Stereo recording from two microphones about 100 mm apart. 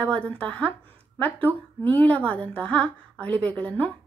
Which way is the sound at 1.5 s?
20° right (ahead or behind).